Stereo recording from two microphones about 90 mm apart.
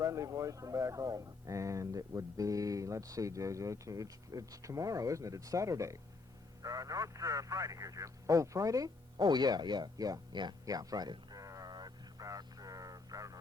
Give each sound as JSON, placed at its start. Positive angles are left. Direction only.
{"t": 0.0, "sound": "speech", "side_deg": -35}